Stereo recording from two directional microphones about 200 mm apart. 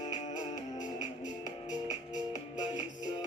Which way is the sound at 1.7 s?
20° left (ahead or behind).